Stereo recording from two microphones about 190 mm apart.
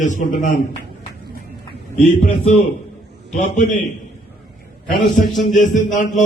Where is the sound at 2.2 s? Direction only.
40° left (ahead or behind).